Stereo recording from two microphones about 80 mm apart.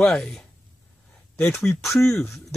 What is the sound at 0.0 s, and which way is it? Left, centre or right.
Speech, centre.